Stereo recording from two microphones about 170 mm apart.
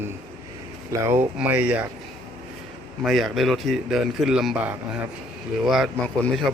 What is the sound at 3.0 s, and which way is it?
A man's voice, centre (ahead or behind).